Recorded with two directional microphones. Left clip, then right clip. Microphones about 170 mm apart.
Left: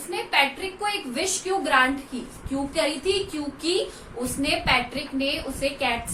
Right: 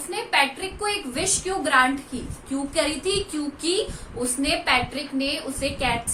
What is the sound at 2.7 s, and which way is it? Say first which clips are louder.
Speech: even; 35° right (ahead or behind).